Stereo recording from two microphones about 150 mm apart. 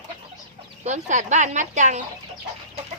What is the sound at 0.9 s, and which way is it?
A child's voice, 50° right (ahead or behind).